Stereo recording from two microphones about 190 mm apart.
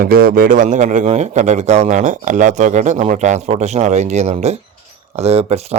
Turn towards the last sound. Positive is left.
turn(degrees=-35)  # may be behind; listen again after turning